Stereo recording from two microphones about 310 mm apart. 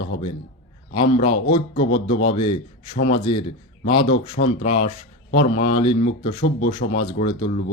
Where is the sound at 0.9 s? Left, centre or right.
Centre.